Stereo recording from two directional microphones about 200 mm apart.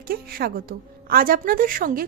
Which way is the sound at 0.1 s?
50° right (ahead or behind).